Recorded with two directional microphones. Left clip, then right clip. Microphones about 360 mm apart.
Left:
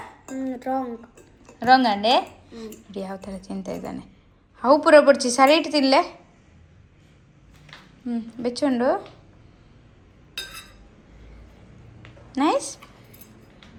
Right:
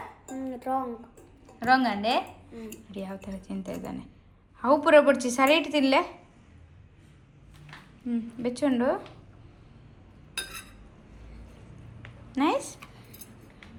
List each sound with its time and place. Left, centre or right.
0.3 s a sound: left
1.5 s a woman's voice: centre
8.0 s a woman's voice: centre
12.3 s a woman's voice: centre